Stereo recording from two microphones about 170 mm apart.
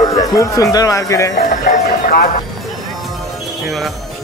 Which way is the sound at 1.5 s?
50° left (ahead or behind).